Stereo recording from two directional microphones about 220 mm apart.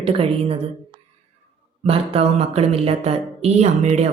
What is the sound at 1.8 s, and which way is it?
A woman's voice, 25° right (ahead or behind).